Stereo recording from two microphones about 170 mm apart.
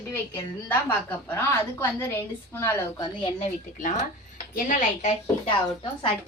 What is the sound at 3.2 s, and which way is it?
A woman's voice, 35° left (ahead or behind).